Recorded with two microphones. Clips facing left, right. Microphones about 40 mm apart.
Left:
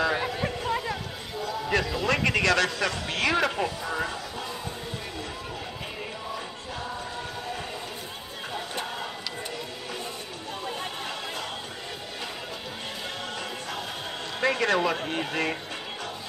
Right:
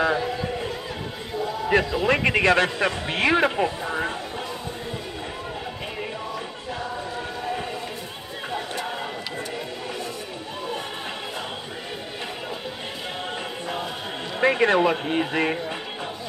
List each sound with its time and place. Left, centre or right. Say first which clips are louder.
1.4 s a sound: right 5 dB; centre
2.0 s a man's voice: right 4 dB; right
14.4 s a man's voice: right 5 dB; right